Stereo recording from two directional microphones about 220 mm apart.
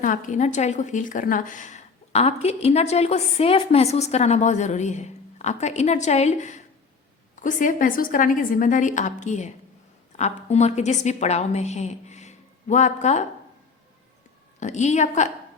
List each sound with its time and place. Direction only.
0.0 s a woman's voice: 35° left (ahead or behind)
14.6 s a woman's voice: 30° left (ahead or behind)